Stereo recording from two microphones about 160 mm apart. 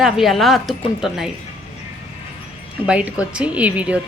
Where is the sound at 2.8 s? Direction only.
5° right (ahead or behind).